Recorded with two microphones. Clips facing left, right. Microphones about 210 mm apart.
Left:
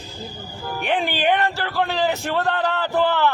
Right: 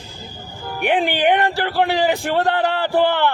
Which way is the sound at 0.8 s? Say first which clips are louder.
Right 5 dB; 15° right (ahead or behind).